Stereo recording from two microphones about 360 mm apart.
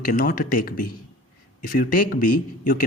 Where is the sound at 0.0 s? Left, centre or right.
Left.